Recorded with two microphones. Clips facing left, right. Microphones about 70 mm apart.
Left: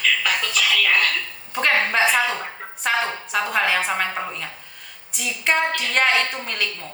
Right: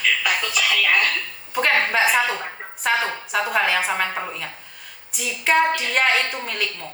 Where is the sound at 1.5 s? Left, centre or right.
Centre.